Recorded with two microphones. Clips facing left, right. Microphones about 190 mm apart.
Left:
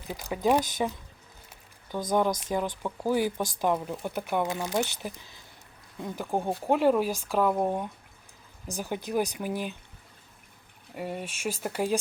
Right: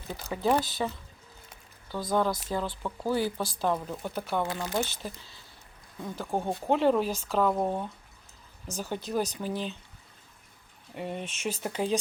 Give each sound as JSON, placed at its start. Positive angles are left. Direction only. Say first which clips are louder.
{"t": 0.1, "sound": "speech", "louder": "left 2 dB", "side_deg": 15}
{"t": 10.9, "sound": "speech", "louder": "left 1 dB", "side_deg": 5}